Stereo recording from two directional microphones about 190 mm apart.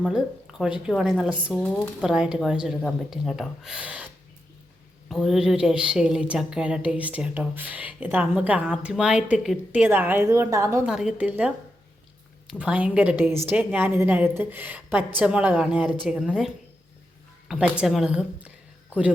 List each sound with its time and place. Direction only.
0.9 s a woman's voice: centre (ahead or behind)
10.8 s a woman's voice: 5° right (ahead or behind)
17.5 s speech: 5° right (ahead or behind)